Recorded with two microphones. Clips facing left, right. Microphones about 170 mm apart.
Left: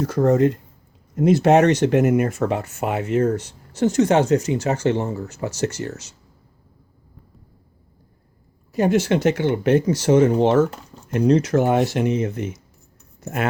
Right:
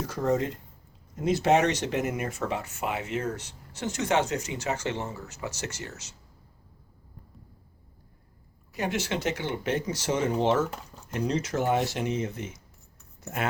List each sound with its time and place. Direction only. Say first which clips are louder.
0.1 s speech: left 10 dB; 60° left (ahead or behind); by 6.1 s 40° left (ahead or behind)
8.7 s speech: left 11 dB; 40° left (ahead or behind); by 12.5 s 60° left (ahead or behind)